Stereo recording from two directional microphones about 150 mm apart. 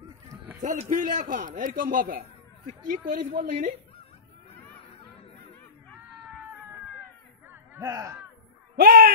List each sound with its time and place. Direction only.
0.6 s a man's voice: 55° right (ahead or behind)
7.4 s a sound: 15° right (ahead or behind)
8.7 s speech: 75° right (ahead or behind)